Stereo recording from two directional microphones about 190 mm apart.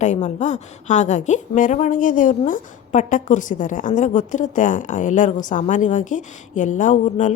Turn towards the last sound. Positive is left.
turn(degrees=40)  # may be behind; listen again after turning